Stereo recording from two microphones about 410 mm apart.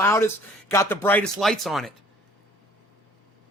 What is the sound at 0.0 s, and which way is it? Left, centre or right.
A man's voice, centre.